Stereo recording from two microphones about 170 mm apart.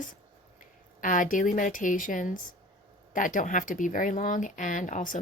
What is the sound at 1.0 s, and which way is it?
Speech, 50° left (ahead or behind).